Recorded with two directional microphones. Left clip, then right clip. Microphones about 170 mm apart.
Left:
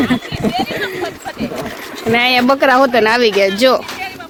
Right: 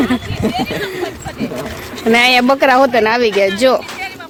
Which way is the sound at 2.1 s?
65° right (ahead or behind).